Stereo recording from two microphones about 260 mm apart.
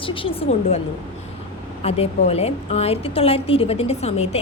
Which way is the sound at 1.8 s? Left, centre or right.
Left.